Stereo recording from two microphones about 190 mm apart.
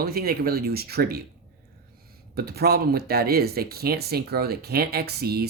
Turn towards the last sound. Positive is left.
turn(degrees=-55)  # may be behind; listen again after turning